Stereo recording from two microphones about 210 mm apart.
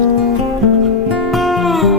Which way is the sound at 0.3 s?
Centre (ahead or behind).